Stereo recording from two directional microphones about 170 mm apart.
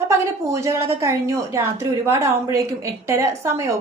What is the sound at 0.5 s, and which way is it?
A woman's voice, 15° right (ahead or behind).